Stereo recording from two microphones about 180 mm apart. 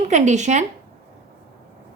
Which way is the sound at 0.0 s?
40° right (ahead or behind).